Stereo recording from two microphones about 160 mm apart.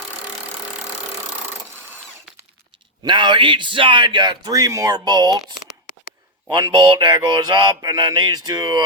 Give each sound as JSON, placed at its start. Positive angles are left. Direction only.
{"t": 3.0, "sound": "a man's voice", "side_deg": -30}
{"t": 6.5, "sound": "a man's voice", "side_deg": -30}